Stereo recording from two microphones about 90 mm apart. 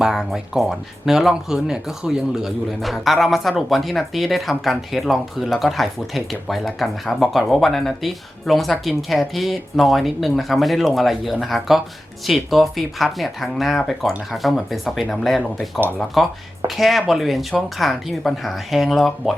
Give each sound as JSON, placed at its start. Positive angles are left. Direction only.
{"t": 0.0, "sound": "speech", "side_deg": -5}